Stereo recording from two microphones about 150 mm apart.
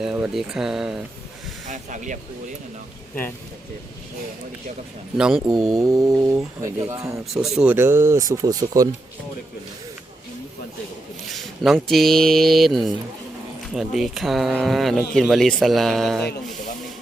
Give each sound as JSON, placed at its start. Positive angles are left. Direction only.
{"t": 0.0, "sound": "speech", "side_deg": -5}
{"t": 1.6, "sound": "speech", "side_deg": -55}
{"t": 5.1, "sound": "speech", "side_deg": -5}
{"t": 5.8, "sound": "speech", "side_deg": -20}
{"t": 7.3, "sound": "speech", "side_deg": -5}
{"t": 11.3, "sound": "speech", "side_deg": 0}